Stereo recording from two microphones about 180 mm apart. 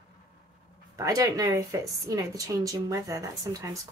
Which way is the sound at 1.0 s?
20° right (ahead or behind).